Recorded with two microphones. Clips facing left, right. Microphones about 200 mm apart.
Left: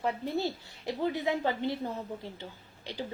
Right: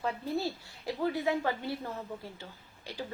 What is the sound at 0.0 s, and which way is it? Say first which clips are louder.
Speech: left 2 dB; 20° left (ahead or behind).